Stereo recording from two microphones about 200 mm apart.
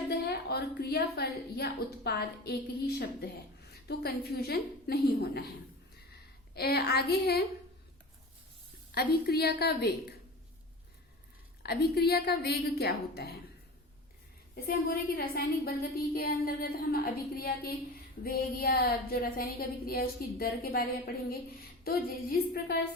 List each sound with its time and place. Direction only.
0.1 s a woman's voice: 55° left (ahead or behind)
6.5 s a woman's voice: 50° left (ahead or behind)
9.0 s a woman's voice: 55° left (ahead or behind)
11.6 s a woman's voice: 50° left (ahead or behind)
14.5 s a woman's voice: 50° left (ahead or behind)